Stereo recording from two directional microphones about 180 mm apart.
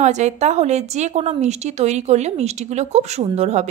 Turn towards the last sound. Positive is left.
turn(degrees=-40)  # may be behind; listen again after turning